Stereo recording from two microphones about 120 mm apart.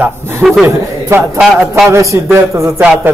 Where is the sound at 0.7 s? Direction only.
25° right (ahead or behind).